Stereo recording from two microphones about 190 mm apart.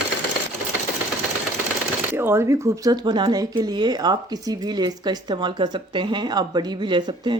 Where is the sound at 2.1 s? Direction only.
15° right (ahead or behind).